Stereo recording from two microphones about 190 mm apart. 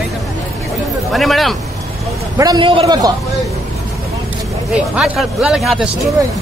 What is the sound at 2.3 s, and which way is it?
Speech, 25° right (ahead or behind).